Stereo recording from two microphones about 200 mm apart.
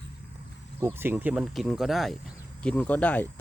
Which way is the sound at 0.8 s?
10° right (ahead or behind).